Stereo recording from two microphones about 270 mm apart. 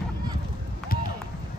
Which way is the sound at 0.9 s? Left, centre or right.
Left.